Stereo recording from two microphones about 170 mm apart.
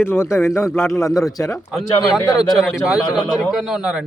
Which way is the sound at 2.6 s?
Centre (ahead or behind).